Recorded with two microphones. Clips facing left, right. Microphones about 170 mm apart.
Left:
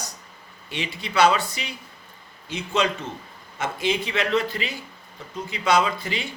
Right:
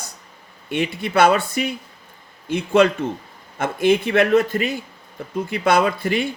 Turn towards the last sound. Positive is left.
turn(degrees=-55)  # may be behind; listen again after turning